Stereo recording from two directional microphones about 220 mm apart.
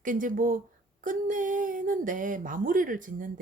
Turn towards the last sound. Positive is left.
turn(degrees=-35)  # may be behind; listen again after turning